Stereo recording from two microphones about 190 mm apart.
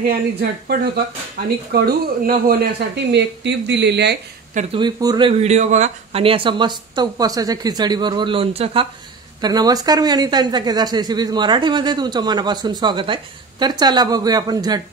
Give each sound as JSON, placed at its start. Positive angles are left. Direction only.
{"t": 0.1, "sound": "speech", "side_deg": -55}
{"t": 4.7, "sound": "speech", "side_deg": -20}
{"t": 5.4, "sound": "speech", "side_deg": -40}